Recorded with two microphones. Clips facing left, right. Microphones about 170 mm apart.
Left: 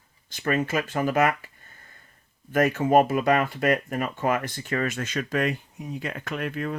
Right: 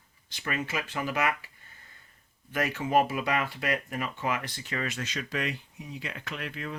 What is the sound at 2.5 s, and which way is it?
Speech, 50° left (ahead or behind).